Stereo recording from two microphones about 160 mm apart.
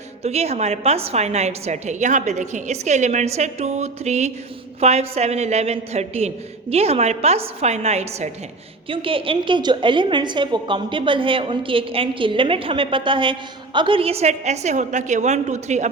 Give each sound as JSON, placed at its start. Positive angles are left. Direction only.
{"t": 0.2, "sound": "a woman's voice", "side_deg": -40}